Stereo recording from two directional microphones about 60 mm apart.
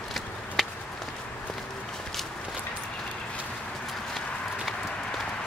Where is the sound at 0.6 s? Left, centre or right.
Centre.